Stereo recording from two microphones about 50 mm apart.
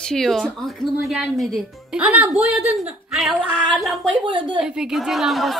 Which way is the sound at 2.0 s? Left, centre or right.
Right.